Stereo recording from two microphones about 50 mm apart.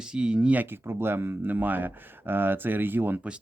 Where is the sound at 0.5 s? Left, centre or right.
Right.